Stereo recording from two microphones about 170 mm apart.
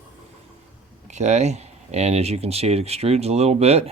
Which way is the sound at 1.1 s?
45° right (ahead or behind).